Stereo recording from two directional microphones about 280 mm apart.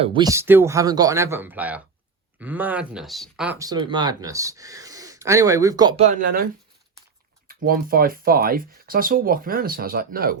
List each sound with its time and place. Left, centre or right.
0.0 s speech: centre
6.1 s speech: right